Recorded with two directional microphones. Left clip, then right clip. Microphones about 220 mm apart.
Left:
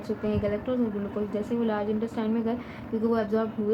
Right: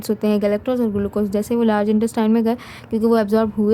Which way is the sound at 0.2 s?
60° right (ahead or behind).